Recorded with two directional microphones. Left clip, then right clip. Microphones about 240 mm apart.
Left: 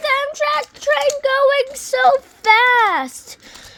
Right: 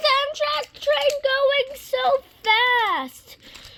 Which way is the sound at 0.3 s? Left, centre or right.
Centre.